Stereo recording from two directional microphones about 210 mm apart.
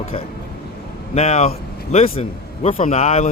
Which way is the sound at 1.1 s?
30° left (ahead or behind).